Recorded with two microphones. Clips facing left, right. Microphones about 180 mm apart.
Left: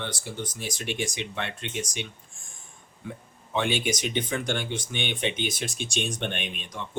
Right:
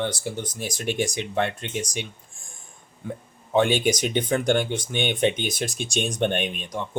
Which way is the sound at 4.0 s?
45° right (ahead or behind).